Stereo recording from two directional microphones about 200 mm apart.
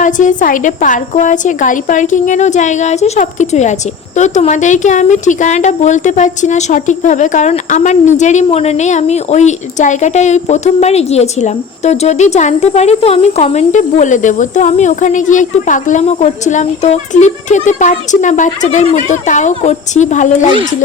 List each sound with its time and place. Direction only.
0.0 s speech: 40° left (ahead or behind)